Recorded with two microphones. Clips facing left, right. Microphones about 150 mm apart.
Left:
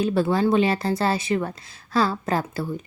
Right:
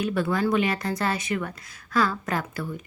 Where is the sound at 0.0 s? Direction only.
30° left (ahead or behind).